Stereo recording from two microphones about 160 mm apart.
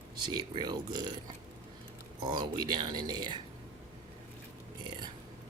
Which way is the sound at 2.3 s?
25° right (ahead or behind).